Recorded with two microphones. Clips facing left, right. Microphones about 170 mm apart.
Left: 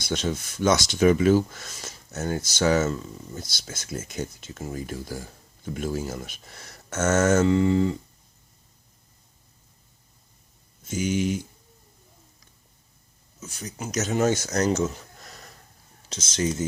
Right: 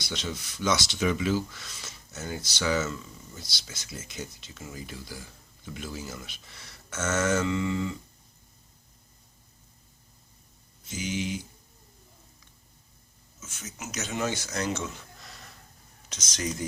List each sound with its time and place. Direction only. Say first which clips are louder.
0.0 s speech: left 8 dB; 50° left (ahead or behind)
10.8 s speech: left 7 dB; 45° left (ahead or behind)
13.4 s speech: left 6 dB; 35° left (ahead or behind)
16.0 s speech: left 7 dB; 30° left (ahead or behind)